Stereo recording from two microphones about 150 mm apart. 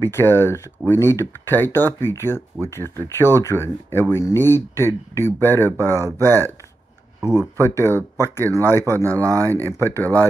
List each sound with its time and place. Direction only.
0.0 s speech: 15° left (ahead or behind)
7.5 s speech: 15° left (ahead or behind)
9.2 s speech: 20° right (ahead or behind)
9.7 s speech: 15° left (ahead or behind)